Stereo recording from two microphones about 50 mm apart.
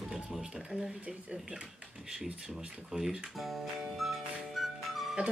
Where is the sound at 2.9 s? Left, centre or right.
Centre.